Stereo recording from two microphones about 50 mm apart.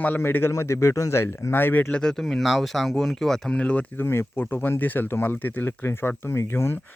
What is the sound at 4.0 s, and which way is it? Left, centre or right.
Speech, left.